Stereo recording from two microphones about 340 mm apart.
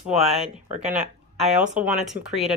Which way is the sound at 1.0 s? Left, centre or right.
Centre.